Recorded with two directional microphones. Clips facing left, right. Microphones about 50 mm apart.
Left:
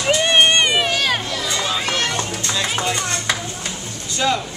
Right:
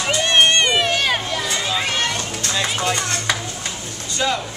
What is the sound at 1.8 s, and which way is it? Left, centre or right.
Music, centre.